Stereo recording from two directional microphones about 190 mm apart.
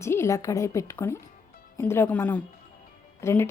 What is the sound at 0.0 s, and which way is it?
A woman's voice, 15° left (ahead or behind).